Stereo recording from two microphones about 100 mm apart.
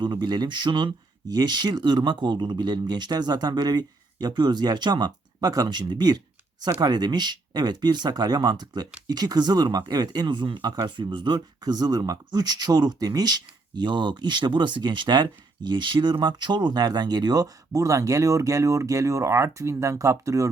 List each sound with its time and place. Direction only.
0.0 s speech: 45° right (ahead or behind); by 20.5 s 30° right (ahead or behind)